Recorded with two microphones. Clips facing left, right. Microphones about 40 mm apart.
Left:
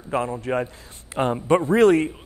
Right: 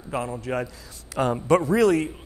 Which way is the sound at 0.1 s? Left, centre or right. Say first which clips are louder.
Left 4 dB; left.